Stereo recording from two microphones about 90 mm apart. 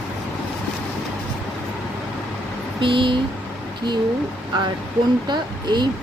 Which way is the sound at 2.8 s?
65° right (ahead or behind).